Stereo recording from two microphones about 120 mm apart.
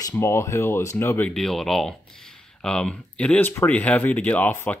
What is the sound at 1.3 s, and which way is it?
Speech, 5° left (ahead or behind).